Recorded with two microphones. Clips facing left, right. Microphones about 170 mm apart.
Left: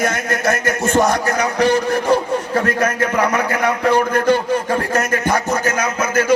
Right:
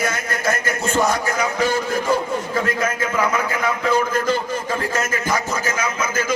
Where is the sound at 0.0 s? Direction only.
55° left (ahead or behind).